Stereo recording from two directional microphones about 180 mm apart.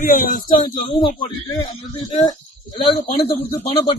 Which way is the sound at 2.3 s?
30° left (ahead or behind).